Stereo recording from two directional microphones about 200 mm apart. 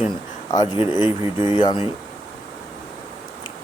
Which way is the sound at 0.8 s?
10° right (ahead or behind).